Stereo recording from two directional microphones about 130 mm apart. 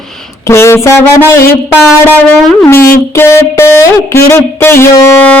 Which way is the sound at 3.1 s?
20° left (ahead or behind).